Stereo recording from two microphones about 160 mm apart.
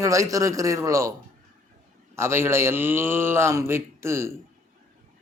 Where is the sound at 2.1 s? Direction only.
15° right (ahead or behind).